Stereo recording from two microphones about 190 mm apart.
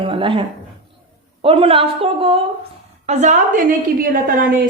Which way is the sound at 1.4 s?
30° right (ahead or behind).